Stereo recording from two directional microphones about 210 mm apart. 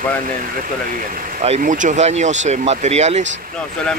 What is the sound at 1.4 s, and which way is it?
Speech, 35° right (ahead or behind).